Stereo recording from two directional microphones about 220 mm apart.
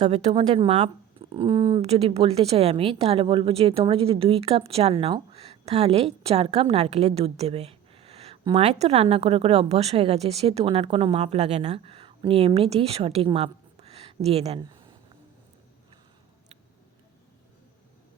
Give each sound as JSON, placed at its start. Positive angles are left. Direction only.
{"t": 0.0, "sound": "speech", "side_deg": -30}